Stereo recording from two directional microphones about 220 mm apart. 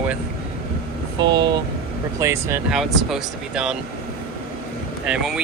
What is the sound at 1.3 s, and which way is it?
Speech, 20° right (ahead or behind).